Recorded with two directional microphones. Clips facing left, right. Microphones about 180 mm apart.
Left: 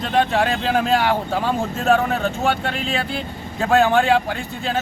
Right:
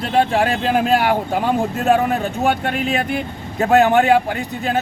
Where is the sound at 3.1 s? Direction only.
20° right (ahead or behind).